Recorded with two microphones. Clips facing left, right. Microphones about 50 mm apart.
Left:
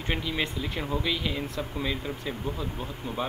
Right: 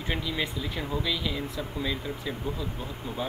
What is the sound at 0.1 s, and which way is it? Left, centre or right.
Speech, left.